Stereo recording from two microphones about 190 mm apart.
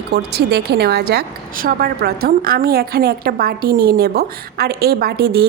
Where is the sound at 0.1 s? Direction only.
60° right (ahead or behind).